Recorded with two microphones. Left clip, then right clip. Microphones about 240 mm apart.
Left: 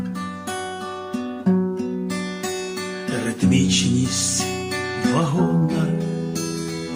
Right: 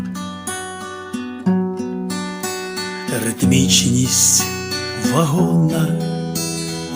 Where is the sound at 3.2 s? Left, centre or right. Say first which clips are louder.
Right 4 dB; right.